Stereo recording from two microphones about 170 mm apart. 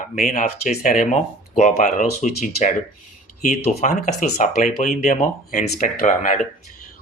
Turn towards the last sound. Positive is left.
turn(degrees=50)  # may be behind; listen again after turning